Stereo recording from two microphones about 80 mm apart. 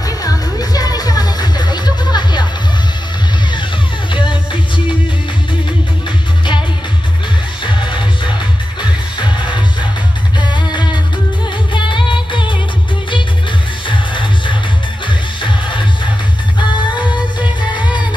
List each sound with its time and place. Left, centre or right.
0.0 s music: left
4.1 s music: left
7.6 s music: left
10.4 s music: left
11.7 s music: left
13.8 s music: left